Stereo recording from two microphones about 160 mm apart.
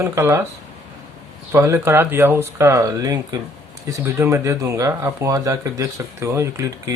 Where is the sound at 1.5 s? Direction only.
15° right (ahead or behind).